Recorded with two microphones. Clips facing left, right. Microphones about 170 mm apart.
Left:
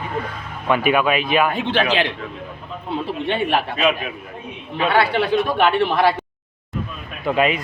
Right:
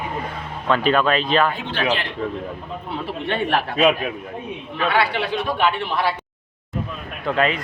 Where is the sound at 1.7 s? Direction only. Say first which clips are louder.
Left 4 dB; 85° left.